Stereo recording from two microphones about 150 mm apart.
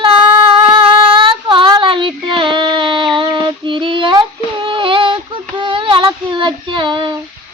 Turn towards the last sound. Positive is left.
turn(degrees=-30)  # may be behind; listen again after turning